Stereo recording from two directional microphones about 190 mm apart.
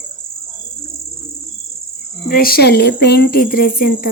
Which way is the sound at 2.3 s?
50° left (ahead or behind).